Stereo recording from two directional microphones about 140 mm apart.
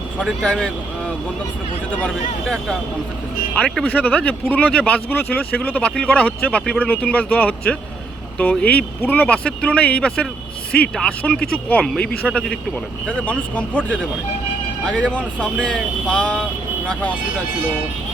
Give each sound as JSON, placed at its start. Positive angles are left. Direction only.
{"t": 0.2, "sound": "speech", "side_deg": 5}
{"t": 2.0, "sound": "speech", "side_deg": 5}